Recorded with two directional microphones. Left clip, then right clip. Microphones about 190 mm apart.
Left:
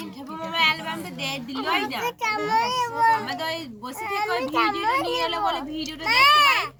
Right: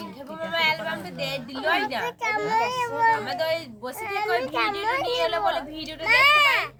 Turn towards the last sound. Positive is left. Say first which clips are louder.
# left 1 dB
turn(degrees=5)  # may be behind; listen again after turning